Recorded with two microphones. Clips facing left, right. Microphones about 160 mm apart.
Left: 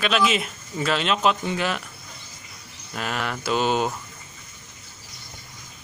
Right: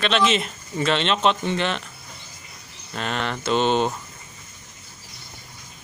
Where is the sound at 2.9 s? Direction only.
5° left (ahead or behind).